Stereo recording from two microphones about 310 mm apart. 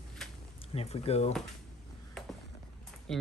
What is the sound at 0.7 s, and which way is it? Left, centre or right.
Speech, centre.